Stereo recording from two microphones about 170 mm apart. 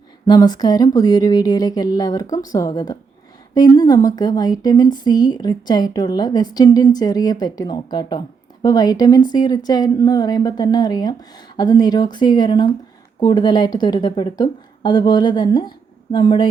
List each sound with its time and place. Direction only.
0.3 s speech: 25° left (ahead or behind)